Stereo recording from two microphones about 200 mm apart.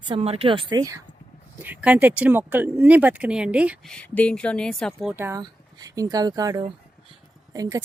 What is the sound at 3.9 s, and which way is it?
Speech, 5° left (ahead or behind).